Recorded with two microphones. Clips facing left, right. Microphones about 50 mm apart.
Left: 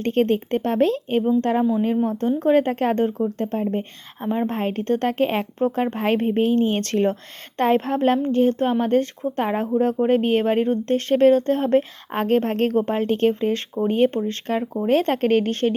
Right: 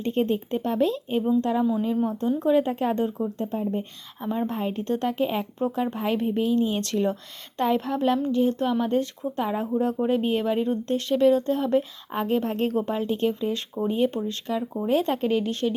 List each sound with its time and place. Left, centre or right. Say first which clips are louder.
0.0 s a woman's voice: left 5 dB; left
4.2 s a woman's voice: left 4 dB; left
4.5 s speech: left 4 dB; left